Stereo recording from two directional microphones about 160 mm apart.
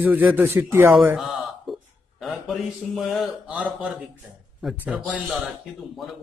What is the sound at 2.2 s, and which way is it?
A man's voice, centre (ahead or behind).